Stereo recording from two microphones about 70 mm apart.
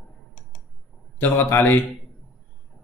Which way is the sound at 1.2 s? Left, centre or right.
Left.